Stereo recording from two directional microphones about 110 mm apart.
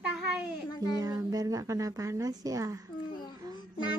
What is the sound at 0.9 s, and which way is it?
A woman's voice, 35° right (ahead or behind).